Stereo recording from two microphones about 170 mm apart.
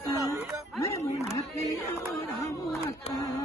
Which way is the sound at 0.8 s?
20° left (ahead or behind).